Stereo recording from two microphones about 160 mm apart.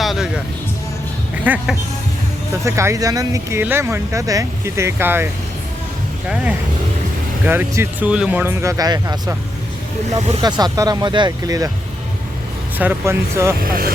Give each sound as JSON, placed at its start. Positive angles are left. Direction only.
{"t": 0.0, "sound": "music", "side_deg": 0}
{"t": 1.5, "sound": "speech", "side_deg": -10}
{"t": 2.6, "sound": "speech", "side_deg": -20}
{"t": 10.4, "sound": "speech", "side_deg": -25}
{"t": 12.8, "sound": "speech", "side_deg": -15}
{"t": 13.6, "sound": "speech", "side_deg": -65}